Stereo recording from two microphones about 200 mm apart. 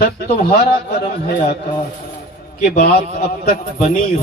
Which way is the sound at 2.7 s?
50° left (ahead or behind).